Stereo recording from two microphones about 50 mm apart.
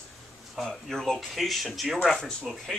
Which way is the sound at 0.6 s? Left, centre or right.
Centre.